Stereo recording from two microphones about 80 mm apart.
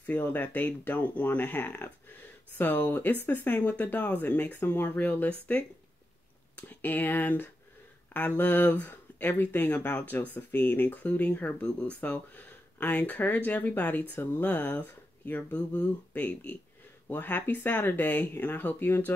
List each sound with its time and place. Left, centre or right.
0.0 s speech: left